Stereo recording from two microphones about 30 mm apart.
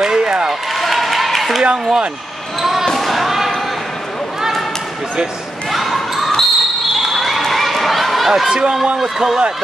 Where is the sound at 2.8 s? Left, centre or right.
Centre.